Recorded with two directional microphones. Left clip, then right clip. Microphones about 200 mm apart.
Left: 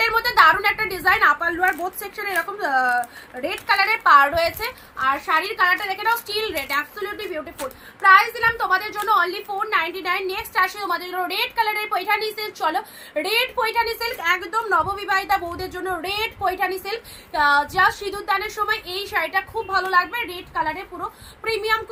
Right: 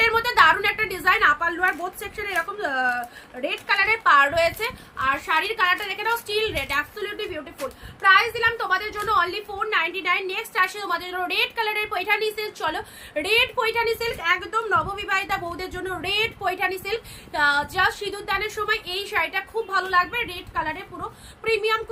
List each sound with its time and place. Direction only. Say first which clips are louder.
0.0 s a woman's voice: left 2 dB; 20° right (ahead or behind)